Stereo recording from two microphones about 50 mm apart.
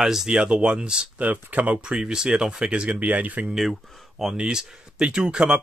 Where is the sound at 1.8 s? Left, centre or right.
Centre; by 3.5 s right.